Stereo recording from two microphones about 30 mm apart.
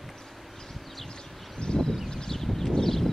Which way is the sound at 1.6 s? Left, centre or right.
Left.